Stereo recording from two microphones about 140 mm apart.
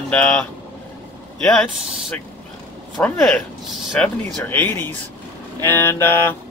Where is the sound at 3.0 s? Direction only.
5° left (ahead or behind).